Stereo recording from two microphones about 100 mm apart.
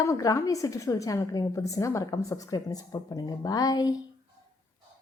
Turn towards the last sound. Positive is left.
turn(degrees=40)  # may be behind; listen again after turning